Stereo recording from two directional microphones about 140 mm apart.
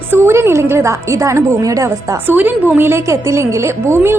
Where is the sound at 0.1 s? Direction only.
20° right (ahead or behind).